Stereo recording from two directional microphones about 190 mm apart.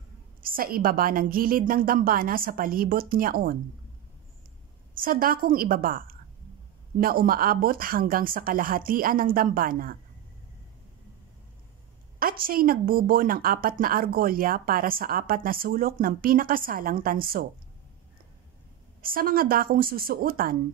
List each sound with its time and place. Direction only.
0.4 s speech: 50° right (ahead or behind)
4.9 s speech: 50° right (ahead or behind)
12.2 s speech: 50° right (ahead or behind)
18.9 s speech: 50° right (ahead or behind)